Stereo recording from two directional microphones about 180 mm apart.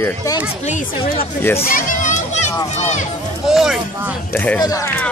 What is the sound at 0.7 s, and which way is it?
Speech, 40° left (ahead or behind).